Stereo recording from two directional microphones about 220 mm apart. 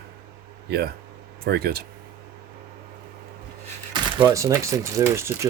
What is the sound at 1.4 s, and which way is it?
Speech, 45° right (ahead or behind).